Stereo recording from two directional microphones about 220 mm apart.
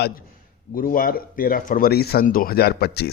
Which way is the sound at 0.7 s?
40° left (ahead or behind).